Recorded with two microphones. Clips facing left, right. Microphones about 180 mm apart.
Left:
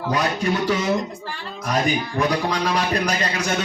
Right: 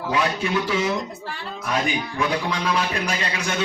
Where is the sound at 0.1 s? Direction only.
40° left (ahead or behind).